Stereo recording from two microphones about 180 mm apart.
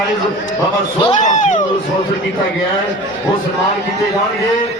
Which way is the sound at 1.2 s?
45° left (ahead or behind).